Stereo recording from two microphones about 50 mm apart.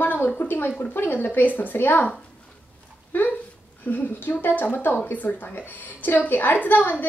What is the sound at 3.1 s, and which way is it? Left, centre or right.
Speech, left.